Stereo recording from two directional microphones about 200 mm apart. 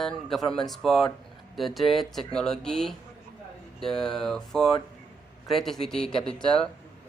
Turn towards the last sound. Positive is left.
turn(degrees=5)  # may be behind; listen again after turning